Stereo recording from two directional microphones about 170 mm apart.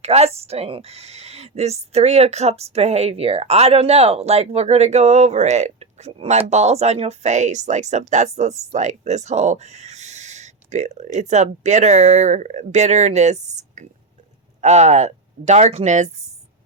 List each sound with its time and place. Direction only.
0.0 s speech: 40° right (ahead or behind)